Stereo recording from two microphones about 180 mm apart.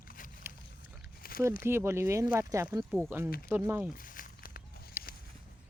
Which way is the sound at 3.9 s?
50° left (ahead or behind).